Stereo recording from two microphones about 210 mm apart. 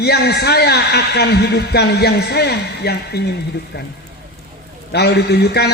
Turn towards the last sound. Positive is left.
turn(degrees=50)  # may be behind; listen again after turning